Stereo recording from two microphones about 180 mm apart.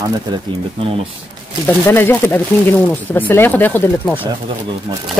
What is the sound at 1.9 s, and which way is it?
Speech, 10° left (ahead or behind).